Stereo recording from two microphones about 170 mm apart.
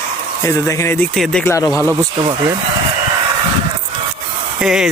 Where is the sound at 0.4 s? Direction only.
15° left (ahead or behind).